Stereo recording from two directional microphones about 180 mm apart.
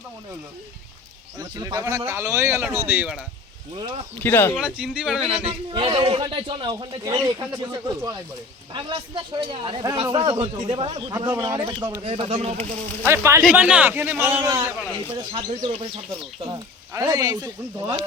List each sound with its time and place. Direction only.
1.4 s a man's voice: 20° right (ahead or behind)
3.8 s speech: 25° right (ahead or behind)
4.2 s speech: 10° left (ahead or behind)
4.5 s speech: 5° right (ahead or behind)
5.5 s speech: 30° right (ahead or behind)
11.1 s speech: 20° right (ahead or behind)
12.0 s speech: 35° right (ahead or behind)
13.1 s a man's voice: 15° right (ahead or behind)
15.1 s speech: 30° right (ahead or behind)
16.5 s speech: 20° right (ahead or behind)